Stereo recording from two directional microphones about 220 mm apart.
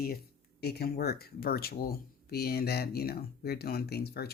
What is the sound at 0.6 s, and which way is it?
Speech, 45° left (ahead or behind).